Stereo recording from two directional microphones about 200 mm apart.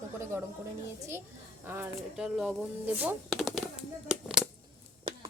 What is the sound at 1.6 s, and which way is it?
Speech, 10° right (ahead or behind).